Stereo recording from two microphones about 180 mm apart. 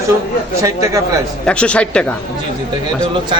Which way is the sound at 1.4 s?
5° left (ahead or behind).